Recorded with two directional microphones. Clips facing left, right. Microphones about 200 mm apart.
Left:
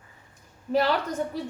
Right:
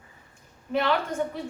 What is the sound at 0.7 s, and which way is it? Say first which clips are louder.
Speech: left 2 dB; 40° left (ahead or behind).